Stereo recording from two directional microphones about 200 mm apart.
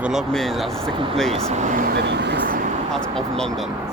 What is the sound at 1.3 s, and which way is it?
Speech, 35° right (ahead or behind).